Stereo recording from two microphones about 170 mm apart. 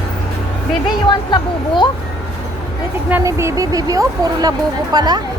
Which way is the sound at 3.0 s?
15° right (ahead or behind).